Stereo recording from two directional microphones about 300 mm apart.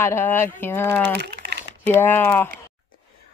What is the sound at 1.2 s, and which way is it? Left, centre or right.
Typing, right.